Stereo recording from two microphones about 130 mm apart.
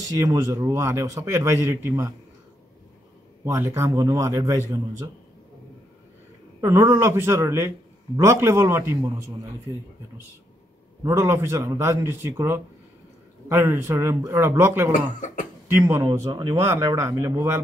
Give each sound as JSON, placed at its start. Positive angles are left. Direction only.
{"t": 0.1, "sound": "a man's voice", "side_deg": -25}
{"t": 3.4, "sound": "a man's voice", "side_deg": -20}
{"t": 6.6, "sound": "a man's voice", "side_deg": -20}
{"t": 11.1, "sound": "a man's voice", "side_deg": -25}
{"t": 15.1, "sound": "speech", "side_deg": 70}
{"t": 15.7, "sound": "a man's voice", "side_deg": -25}